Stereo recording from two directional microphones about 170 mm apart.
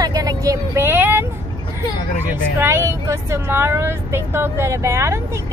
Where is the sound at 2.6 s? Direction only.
15° right (ahead or behind).